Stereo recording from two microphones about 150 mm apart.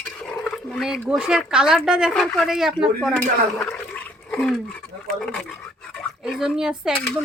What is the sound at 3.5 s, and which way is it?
A woman's voice, 10° left (ahead or behind).